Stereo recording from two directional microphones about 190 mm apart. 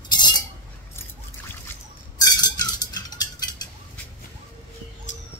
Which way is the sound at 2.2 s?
20° left (ahead or behind).